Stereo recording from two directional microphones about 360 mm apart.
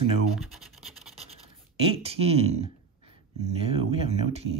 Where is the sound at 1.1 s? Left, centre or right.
Centre.